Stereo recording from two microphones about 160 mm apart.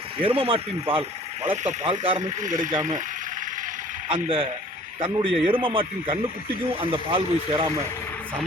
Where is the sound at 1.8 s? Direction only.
30° right (ahead or behind).